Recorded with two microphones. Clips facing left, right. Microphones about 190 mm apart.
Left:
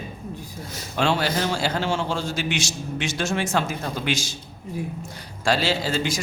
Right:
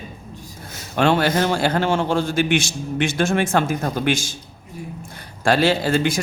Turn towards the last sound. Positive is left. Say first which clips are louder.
# right 5 dB
turn(degrees=-55)  # may be behind; listen again after turning